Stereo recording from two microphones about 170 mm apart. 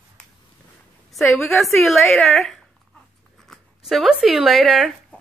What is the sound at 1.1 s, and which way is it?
A woman's voice, centre (ahead or behind).